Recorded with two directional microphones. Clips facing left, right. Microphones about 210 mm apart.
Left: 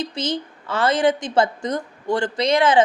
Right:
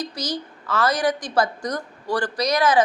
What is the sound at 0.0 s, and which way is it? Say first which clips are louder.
A woman's voice: left 3 dB; 25° left (ahead or behind).